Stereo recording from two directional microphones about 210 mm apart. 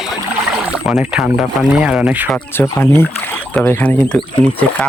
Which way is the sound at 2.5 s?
10° left (ahead or behind).